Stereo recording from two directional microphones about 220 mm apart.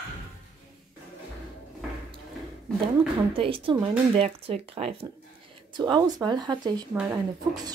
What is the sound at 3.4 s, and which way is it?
A woman's voice, 25° right (ahead or behind).